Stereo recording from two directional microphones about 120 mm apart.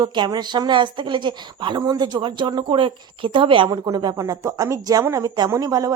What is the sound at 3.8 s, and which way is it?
A woman's voice, 30° right (ahead or behind).